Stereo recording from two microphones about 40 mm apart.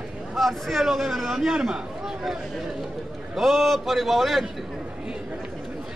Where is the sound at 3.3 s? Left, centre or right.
Centre.